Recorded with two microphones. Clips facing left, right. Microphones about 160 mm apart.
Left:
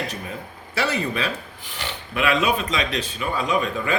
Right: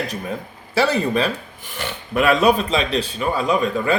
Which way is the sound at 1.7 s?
45° right (ahead or behind).